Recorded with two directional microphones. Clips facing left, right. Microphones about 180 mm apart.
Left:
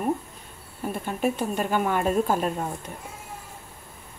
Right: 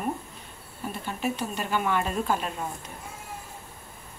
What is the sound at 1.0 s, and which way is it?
Speech, 50° left (ahead or behind).